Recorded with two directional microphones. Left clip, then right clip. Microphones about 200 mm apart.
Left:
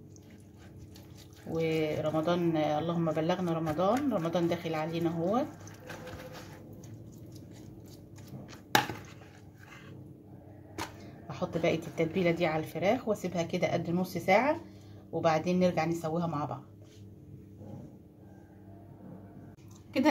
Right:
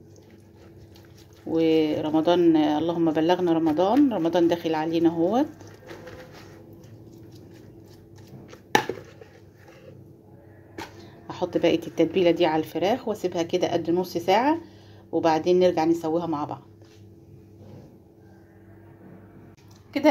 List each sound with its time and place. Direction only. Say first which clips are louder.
1.5 s speech: right 9 dB; 45° right (ahead or behind)
11.2 s a woman's voice: right 8 dB; 40° right (ahead or behind)